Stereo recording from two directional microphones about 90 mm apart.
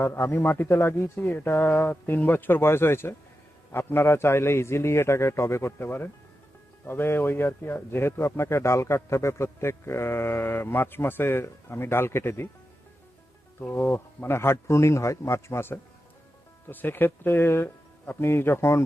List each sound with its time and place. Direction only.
0.0 s speech: 30° left (ahead or behind)
13.6 s speech: 25° left (ahead or behind)